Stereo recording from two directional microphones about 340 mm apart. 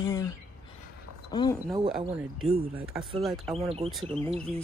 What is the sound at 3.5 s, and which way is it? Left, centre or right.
Speech, centre.